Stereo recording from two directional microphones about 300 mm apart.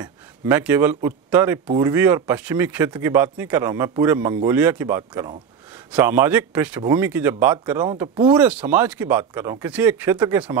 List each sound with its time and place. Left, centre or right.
0.0 s speech: centre
8.3 s speech: centre